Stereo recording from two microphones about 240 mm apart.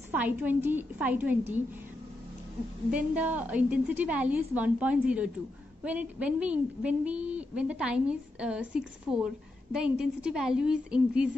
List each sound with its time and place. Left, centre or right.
0.1 s a woman's voice: centre
2.9 s a woman's voice: centre